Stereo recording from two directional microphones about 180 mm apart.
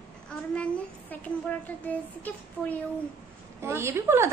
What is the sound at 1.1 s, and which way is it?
Speech, 10° left (ahead or behind).